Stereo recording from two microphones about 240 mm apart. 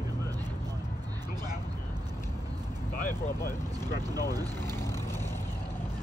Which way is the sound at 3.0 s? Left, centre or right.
Left.